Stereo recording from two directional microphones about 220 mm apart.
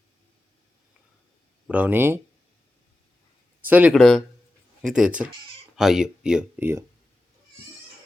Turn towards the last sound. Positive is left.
turn(degrees=-10)  # may be behind; listen again after turning